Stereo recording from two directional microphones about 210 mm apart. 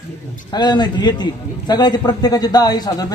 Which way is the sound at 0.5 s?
20° left (ahead or behind).